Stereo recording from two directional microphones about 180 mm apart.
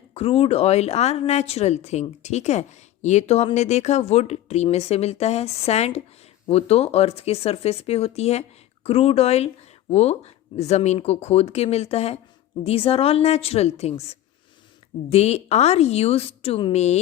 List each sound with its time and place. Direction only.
0.1 s speech: 35° left (ahead or behind)